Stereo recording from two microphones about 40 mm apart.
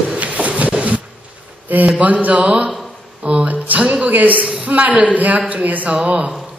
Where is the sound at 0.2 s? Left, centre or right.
Right.